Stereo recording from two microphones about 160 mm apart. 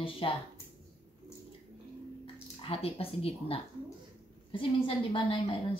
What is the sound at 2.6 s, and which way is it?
Speech, 35° left (ahead or behind).